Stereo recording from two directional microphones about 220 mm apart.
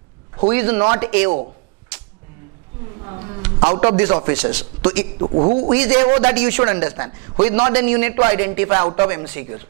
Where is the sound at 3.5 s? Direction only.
25° right (ahead or behind).